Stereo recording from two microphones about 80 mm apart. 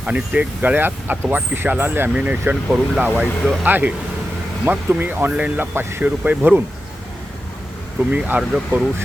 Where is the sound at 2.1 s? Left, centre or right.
Centre.